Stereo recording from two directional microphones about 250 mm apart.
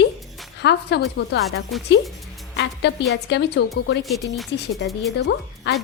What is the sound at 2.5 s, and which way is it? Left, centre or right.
A woman's voice, left.